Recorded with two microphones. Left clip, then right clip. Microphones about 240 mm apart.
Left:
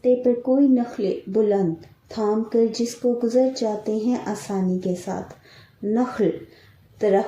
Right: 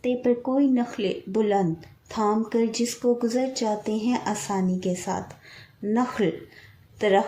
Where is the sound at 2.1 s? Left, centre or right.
Right.